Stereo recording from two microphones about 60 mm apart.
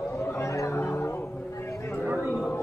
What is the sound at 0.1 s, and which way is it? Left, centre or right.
Chatter, left.